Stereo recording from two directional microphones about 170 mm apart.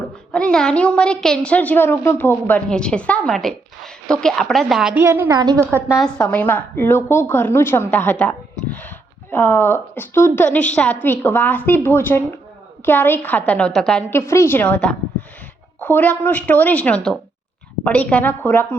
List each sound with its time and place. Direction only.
0.3 s a woman's voice: 5° left (ahead or behind)
5.0 s a woman's voice: 15° right (ahead or behind)
5.9 s a woman's voice: 5° left (ahead or behind)
14.1 s a woman's voice: 15° left (ahead or behind)